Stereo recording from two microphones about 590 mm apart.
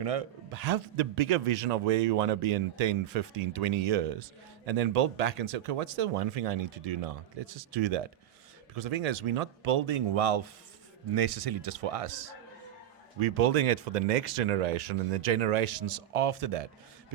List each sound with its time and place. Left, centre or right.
0.0 s a man's voice: right
13.1 s a man's voice: right